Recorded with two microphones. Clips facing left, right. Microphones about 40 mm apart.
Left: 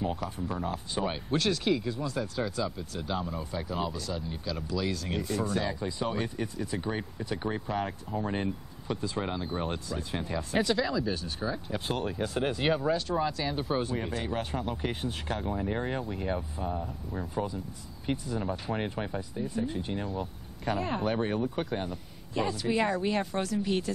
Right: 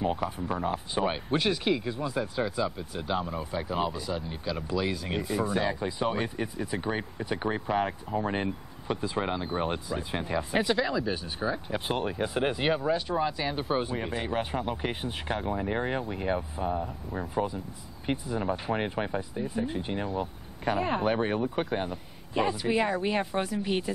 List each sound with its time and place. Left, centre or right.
0.0 s speech: centre